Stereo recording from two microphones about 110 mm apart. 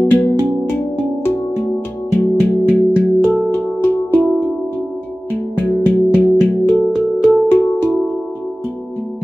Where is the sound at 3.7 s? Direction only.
15° left (ahead or behind).